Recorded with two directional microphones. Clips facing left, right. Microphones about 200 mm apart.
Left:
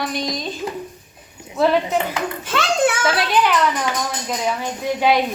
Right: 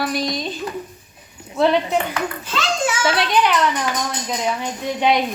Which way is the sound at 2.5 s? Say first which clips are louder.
Left 4 dB; 60° left (ahead or behind).